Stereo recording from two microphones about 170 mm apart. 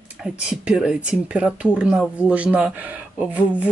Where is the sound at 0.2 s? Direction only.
5° right (ahead or behind).